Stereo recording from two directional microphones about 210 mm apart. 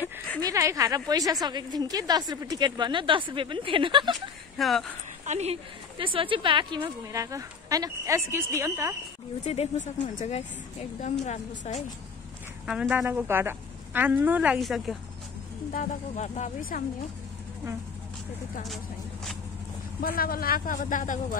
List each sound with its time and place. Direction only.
0.4 s a woman's voice: 15° right (ahead or behind)
4.6 s speech: centre (ahead or behind)
5.2 s a woman's voice: 30° right (ahead or behind); by 8.9 s 15° right (ahead or behind)
9.4 s a woman's voice: 30° left (ahead or behind)
12.6 s a woman's voice: 5° right (ahead or behind)
15.7 s a woman's voice: 35° left (ahead or behind)
20.0 s a woman's voice: 45° left (ahead or behind)